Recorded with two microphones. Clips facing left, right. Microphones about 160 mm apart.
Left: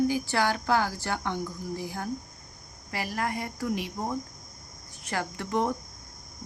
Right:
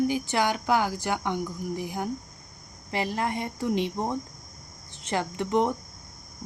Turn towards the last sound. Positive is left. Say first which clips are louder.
# right 3 dB
turn(degrees=-20)  # may be behind; listen again after turning